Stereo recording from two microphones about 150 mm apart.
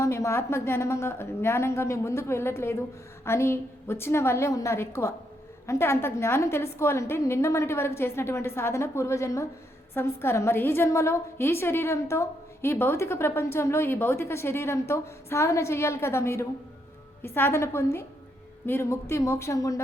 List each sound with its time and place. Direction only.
0.0 s a woman's voice: 20° left (ahead or behind)